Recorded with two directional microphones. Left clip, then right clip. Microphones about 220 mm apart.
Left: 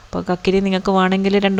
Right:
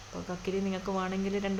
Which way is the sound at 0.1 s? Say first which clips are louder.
Left 17 dB; 40° left (ahead or behind).